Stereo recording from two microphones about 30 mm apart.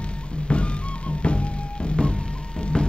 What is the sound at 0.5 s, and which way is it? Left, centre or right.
Music, left.